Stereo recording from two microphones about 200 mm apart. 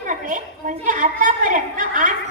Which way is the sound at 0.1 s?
40° right (ahead or behind).